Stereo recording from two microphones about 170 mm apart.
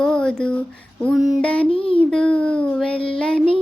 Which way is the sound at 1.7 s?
35° left (ahead or behind).